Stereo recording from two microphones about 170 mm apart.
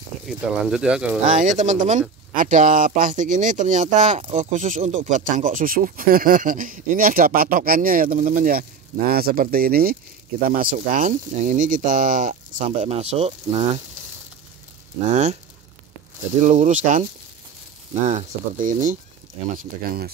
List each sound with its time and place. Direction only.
0.3 s speech: 5° right (ahead or behind)
1.2 s speech: 45° right (ahead or behind)
15.0 s speech: 40° right (ahead or behind)
16.3 s speech: 45° right (ahead or behind)
18.0 s speech: 45° right (ahead or behind)